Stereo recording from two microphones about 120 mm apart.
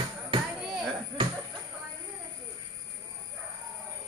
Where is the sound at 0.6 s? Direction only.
Centre (ahead or behind).